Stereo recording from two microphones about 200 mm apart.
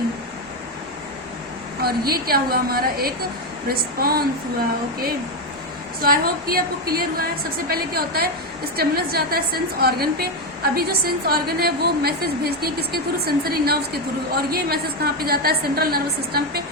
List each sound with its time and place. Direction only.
1.8 s a woman's voice: 50° right (ahead or behind)
6.0 s a woman's voice: 50° right (ahead or behind)